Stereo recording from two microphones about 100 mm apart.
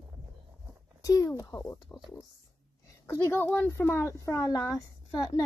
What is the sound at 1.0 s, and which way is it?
Speech, 35° left (ahead or behind).